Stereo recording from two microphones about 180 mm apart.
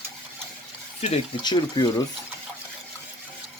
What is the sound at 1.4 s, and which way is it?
Speech, 25° left (ahead or behind).